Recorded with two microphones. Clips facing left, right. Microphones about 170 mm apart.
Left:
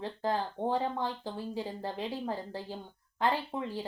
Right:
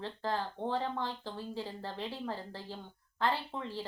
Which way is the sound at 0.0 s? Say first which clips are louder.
Left 3 dB; 15° left (ahead or behind).